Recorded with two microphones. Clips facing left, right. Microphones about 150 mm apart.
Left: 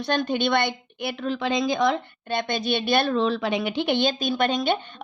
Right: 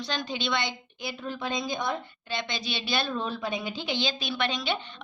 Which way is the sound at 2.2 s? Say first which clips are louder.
Left 9 dB; 55° left (ahead or behind).